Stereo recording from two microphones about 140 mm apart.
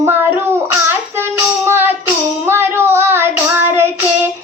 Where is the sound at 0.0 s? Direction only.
15° right (ahead or behind).